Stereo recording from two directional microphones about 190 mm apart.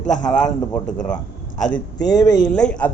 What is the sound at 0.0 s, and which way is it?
Speech, 40° left (ahead or behind).